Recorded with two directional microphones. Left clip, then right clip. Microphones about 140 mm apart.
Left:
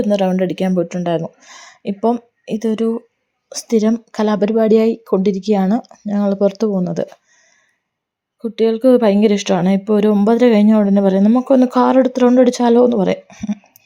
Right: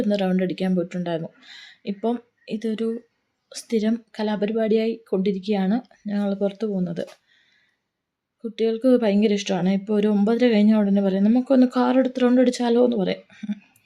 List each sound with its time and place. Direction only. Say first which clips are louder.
0.1 s speech: left 7 dB; 30° left (ahead or behind); by 6.7 s 45° left (ahead or behind)
6.7 s speech: left 9 dB; 35° left (ahead or behind)
8.4 s speech: left 8 dB; 30° left (ahead or behind)